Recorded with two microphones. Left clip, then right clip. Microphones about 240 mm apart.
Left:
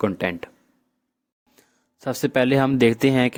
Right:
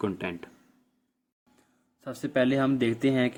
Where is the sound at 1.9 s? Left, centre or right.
Left.